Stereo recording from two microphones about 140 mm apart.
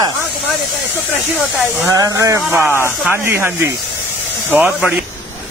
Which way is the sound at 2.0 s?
20° right (ahead or behind).